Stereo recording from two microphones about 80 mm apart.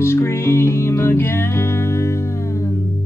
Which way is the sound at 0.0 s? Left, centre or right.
Left.